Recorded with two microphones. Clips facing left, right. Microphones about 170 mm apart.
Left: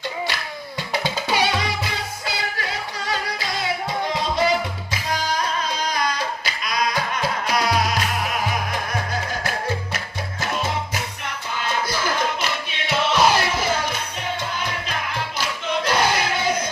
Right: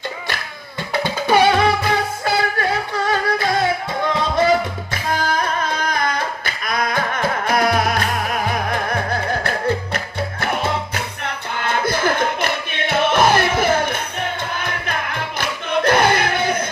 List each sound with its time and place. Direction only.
1.0 s music: 55° right (ahead or behind)